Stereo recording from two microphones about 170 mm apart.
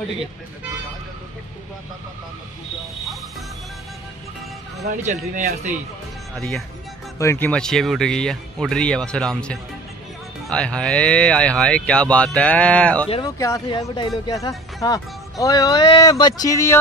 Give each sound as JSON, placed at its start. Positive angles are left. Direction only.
{"t": 5.0, "sound": "speech", "side_deg": -45}
{"t": 6.3, "sound": "speech", "side_deg": 5}
{"t": 13.4, "sound": "speech", "side_deg": 20}